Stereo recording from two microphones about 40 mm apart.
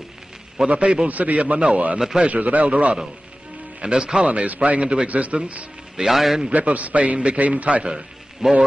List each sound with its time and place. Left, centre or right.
0.6 s a man's voice: centre
1.0 s a man's voice: right
2.0 s a man's voice: centre
2.2 s a man's voice: right
3.8 s a man's voice: right
5.9 s a man's voice: centre
6.5 s a man's voice: right
8.4 s a man's voice: centre